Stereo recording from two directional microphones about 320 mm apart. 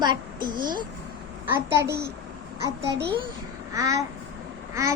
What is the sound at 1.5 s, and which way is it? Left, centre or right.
Child singing, centre.